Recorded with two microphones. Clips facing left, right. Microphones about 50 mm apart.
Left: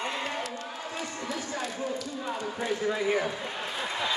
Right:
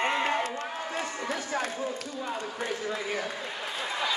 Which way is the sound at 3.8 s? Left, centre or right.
Centre.